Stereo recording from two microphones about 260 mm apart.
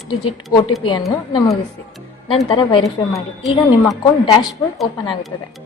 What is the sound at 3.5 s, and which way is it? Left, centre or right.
A woman's voice, centre.